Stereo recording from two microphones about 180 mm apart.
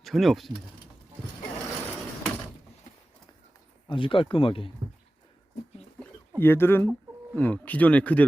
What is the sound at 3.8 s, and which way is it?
Speech, 30° left (ahead or behind).